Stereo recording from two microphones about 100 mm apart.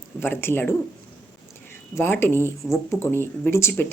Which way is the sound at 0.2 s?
20° left (ahead or behind).